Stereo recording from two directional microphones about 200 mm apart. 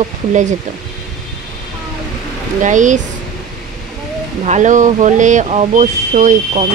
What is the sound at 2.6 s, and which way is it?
Speech, 40° right (ahead or behind).